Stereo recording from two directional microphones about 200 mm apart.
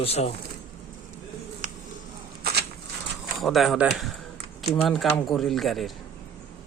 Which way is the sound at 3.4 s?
Centre (ahead or behind).